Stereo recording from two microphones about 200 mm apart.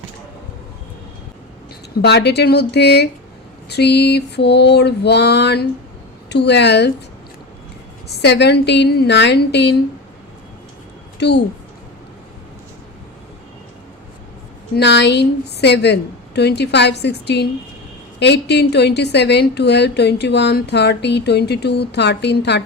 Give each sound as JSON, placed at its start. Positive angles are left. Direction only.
{"t": 2.0, "sound": "a woman's voice", "side_deg": 55}
{"t": 8.2, "sound": "a woman's voice", "side_deg": 55}
{"t": 11.2, "sound": "a woman's voice", "side_deg": 55}
{"t": 14.8, "sound": "a woman's voice", "side_deg": 60}